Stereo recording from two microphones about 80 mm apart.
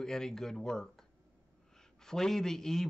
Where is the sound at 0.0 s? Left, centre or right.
Centre.